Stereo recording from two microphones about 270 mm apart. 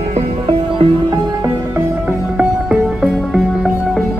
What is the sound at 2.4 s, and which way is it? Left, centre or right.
Music, centre.